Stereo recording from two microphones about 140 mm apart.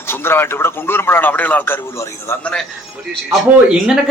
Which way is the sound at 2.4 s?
5° left (ahead or behind).